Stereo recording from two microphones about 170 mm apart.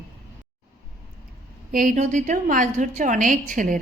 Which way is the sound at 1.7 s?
50° right (ahead or behind).